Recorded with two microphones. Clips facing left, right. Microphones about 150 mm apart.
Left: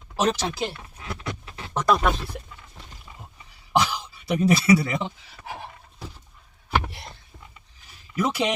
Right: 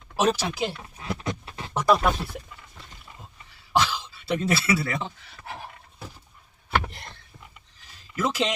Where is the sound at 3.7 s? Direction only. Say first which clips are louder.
Left 1 dB; 15° left (ahead or behind).